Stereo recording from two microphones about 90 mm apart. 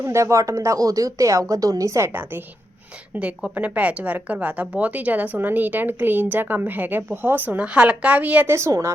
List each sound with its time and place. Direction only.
0.0 s speech: 30° right (ahead or behind)
3.2 s speech: 15° right (ahead or behind)
8.4 s speech: 30° right (ahead or behind)